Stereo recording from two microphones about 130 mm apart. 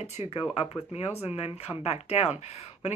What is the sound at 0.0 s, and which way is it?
Speech, 55° left (ahead or behind).